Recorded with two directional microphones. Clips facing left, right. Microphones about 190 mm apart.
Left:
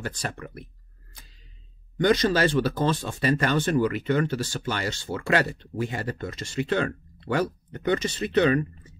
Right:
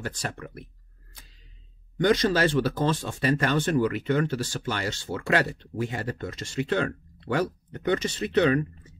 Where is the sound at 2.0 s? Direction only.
35° left (ahead or behind).